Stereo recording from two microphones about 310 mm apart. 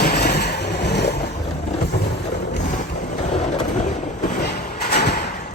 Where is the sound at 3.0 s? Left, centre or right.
Left.